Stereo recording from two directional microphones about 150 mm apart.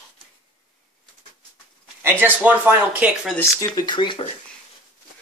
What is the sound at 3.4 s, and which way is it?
Speech, 25° left (ahead or behind).